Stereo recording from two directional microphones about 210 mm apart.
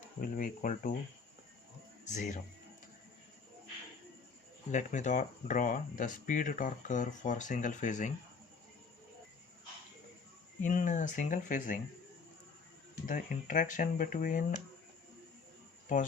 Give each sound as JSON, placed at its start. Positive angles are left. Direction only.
{"t": 0.2, "sound": "speech", "side_deg": 40}
{"t": 2.0, "sound": "speech", "side_deg": 35}
{"t": 4.7, "sound": "speech", "side_deg": 35}
{"t": 10.6, "sound": "speech", "side_deg": 35}
{"t": 13.1, "sound": "speech", "side_deg": 40}